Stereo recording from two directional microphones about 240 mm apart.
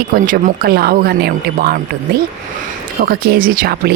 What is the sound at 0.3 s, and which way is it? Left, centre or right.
Speech, right.